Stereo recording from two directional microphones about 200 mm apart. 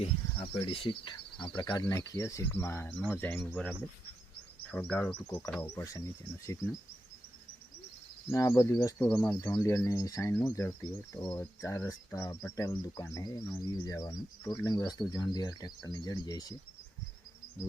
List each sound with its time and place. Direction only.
0.0 s speech: 30° left (ahead or behind)
8.3 s speech: 15° left (ahead or behind)
11.2 s speech: centre (ahead or behind)
11.6 s speech: 15° left (ahead or behind)